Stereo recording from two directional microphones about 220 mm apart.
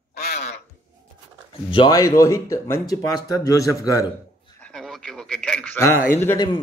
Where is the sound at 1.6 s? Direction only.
20° left (ahead or behind).